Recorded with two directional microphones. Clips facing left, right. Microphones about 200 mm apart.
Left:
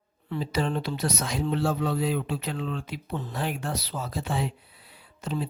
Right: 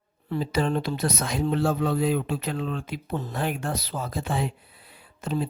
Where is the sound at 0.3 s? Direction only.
50° right (ahead or behind).